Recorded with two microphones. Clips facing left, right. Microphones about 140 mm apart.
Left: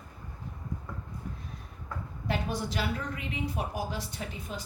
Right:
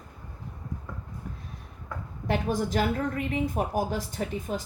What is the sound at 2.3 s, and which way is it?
A woman's voice, 45° right (ahead or behind).